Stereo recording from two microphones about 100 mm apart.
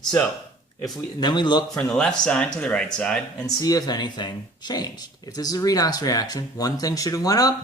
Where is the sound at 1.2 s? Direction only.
50° left (ahead or behind).